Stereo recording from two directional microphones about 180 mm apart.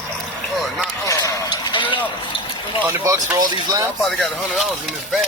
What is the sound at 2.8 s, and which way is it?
Speech, 15° right (ahead or behind).